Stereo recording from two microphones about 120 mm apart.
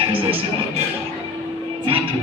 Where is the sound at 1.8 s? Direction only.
50° right (ahead or behind).